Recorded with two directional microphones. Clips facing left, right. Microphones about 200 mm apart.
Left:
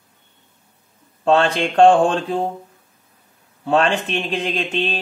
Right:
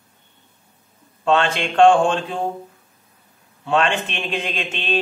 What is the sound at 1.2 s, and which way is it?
Speech, 35° left (ahead or behind).